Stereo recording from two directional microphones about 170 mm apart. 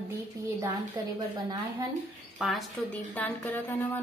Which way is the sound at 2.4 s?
Centre (ahead or behind).